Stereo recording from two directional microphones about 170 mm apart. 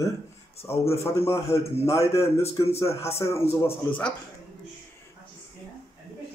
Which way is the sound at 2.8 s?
15° left (ahead or behind).